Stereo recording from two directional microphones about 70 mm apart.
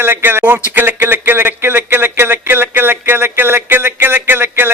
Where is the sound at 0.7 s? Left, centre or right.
Right.